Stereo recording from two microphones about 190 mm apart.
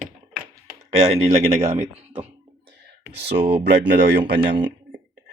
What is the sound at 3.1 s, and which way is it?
Speech, 60° right (ahead or behind).